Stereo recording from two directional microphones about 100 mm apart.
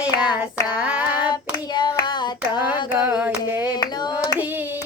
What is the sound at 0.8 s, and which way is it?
Female singing, 10° right (ahead or behind).